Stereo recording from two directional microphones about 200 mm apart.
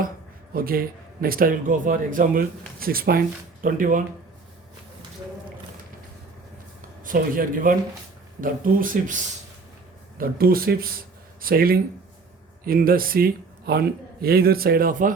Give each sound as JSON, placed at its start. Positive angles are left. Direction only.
{"t": 0.5, "sound": "speech", "side_deg": -45}
{"t": 7.0, "sound": "speech", "side_deg": -45}